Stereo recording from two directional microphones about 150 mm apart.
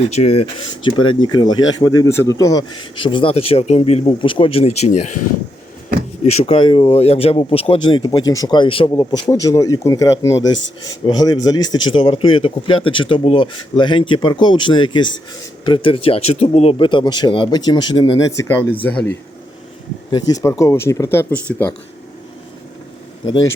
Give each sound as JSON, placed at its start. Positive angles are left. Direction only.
{"t": 0.1, "sound": "speech", "side_deg": 45}
{"t": 0.8, "sound": "speech", "side_deg": 30}
{"t": 6.4, "sound": "speech", "side_deg": 35}
{"t": 18.3, "sound": "speech", "side_deg": 20}
{"t": 20.1, "sound": "speech", "side_deg": 25}